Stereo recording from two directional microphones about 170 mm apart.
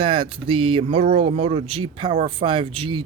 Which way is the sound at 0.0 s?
30° right (ahead or behind).